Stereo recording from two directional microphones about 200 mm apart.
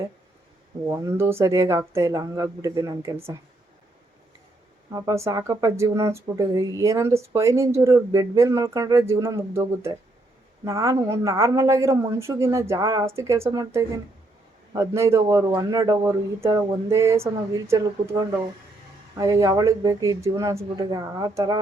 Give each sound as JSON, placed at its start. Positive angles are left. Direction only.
{"t": 0.9, "sound": "speech", "side_deg": -10}
{"t": 4.9, "sound": "speech", "side_deg": -15}